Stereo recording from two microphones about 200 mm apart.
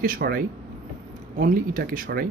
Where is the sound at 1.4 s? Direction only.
45° right (ahead or behind).